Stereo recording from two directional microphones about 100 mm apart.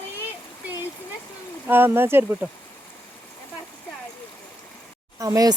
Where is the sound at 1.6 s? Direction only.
20° right (ahead or behind).